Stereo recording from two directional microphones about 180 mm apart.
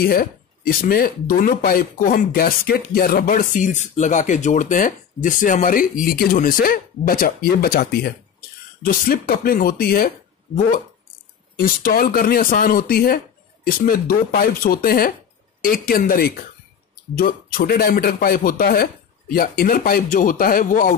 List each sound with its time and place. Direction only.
0.0 s speech: 55° left (ahead or behind)